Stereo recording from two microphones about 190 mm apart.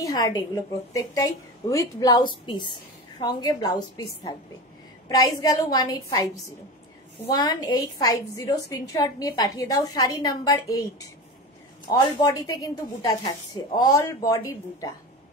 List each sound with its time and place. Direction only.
0.0 s a woman's voice: 20° left (ahead or behind)
7.3 s a woman's voice: 20° left (ahead or behind)